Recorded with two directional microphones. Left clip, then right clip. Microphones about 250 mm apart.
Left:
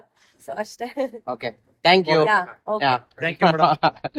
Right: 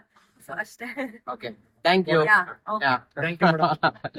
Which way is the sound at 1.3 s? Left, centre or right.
Left.